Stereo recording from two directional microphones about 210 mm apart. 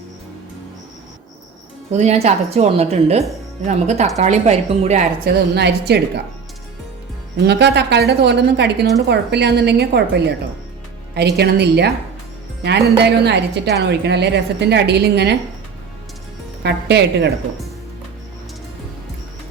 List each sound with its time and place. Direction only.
1.9 s a woman's voice: 35° right (ahead or behind)
5.2 s a woman's voice: 50° right (ahead or behind)
7.4 s a woman's voice: 50° right (ahead or behind)
16.6 s a woman's voice: 55° right (ahead or behind)